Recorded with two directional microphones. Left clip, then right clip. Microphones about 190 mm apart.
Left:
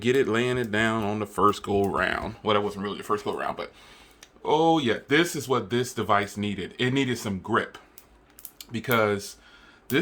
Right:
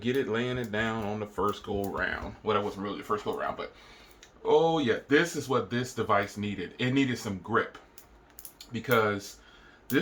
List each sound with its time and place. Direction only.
0.0 s speech: 45° left (ahead or behind)